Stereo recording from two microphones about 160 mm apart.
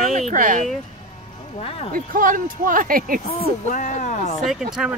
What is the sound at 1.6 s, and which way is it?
Speech, 35° left (ahead or behind).